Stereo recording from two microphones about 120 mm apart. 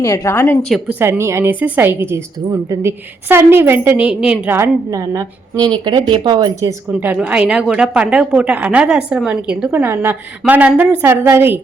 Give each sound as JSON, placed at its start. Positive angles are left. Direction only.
{"t": 0.0, "sound": "a woman's voice", "side_deg": 25}
{"t": 0.9, "sound": "a woman's voice", "side_deg": -15}
{"t": 4.9, "sound": "a woman's voice", "side_deg": -25}
{"t": 6.8, "sound": "a woman's voice", "side_deg": -15}